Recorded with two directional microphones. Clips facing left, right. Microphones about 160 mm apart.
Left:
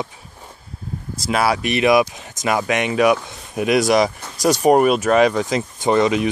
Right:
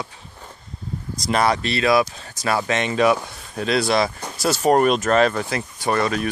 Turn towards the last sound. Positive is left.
turn(degrees=20)  # may be behind; listen again after turning